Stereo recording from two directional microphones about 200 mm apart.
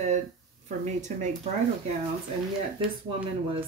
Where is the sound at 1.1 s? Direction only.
35° right (ahead or behind).